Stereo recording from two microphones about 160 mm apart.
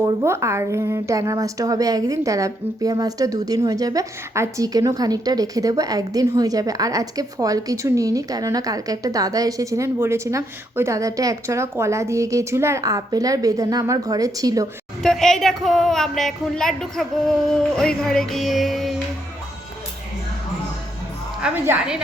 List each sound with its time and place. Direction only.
0.0 s a woman's voice: 15° right (ahead or behind)
15.0 s speech: 5° left (ahead or behind)
21.4 s speech: 10° right (ahead or behind)